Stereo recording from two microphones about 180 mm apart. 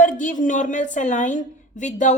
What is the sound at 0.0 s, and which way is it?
A woman's voice, 45° left (ahead or behind).